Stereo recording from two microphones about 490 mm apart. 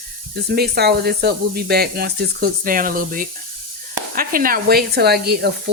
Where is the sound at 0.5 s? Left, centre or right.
Centre.